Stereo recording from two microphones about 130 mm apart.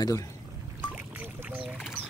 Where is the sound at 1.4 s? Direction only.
5° right (ahead or behind).